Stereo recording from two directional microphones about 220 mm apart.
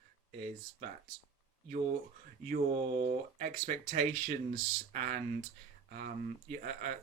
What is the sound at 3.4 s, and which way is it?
Speech, 35° right (ahead or behind).